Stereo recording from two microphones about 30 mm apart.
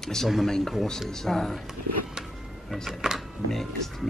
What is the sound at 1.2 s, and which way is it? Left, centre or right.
Speech, centre.